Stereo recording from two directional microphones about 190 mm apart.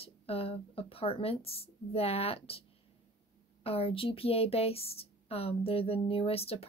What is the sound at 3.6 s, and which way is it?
A woman's voice, 30° left (ahead or behind).